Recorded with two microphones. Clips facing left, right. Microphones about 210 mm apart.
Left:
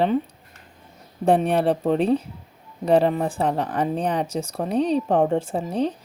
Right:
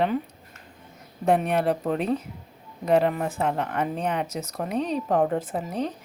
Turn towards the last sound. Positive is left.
turn(degrees=30)  # may be behind; listen again after turning